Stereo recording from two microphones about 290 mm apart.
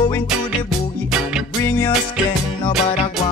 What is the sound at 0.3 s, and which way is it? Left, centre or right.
Music, centre.